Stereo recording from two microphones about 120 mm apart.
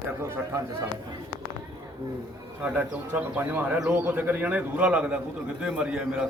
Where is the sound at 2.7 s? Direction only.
10° right (ahead or behind).